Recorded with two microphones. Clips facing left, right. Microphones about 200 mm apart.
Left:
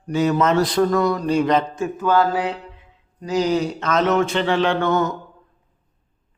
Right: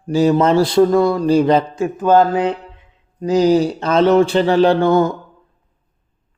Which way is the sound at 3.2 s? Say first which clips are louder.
Right 7 dB; 30° right (ahead or behind).